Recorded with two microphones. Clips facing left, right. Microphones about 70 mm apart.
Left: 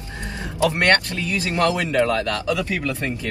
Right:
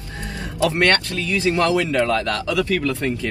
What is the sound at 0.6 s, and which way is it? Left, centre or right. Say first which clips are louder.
A man's voice: even; left.